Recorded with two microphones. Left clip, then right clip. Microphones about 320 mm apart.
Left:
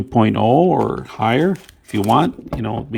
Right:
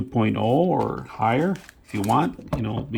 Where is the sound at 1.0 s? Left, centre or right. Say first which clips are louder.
Left 5 dB; left.